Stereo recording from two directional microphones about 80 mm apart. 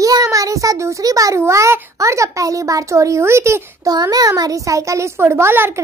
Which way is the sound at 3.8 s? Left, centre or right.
Right.